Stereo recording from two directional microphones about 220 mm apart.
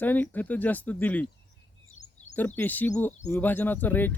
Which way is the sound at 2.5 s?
10° left (ahead or behind).